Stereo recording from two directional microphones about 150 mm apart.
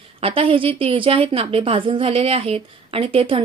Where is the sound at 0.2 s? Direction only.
40° right (ahead or behind).